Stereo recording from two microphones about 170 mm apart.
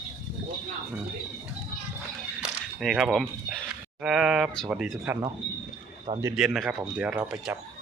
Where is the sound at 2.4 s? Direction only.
Centre (ahead or behind).